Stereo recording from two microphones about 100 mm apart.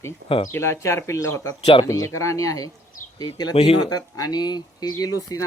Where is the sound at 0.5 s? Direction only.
30° left (ahead or behind).